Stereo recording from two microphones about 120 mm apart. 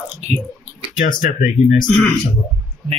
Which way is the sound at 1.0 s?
90° left.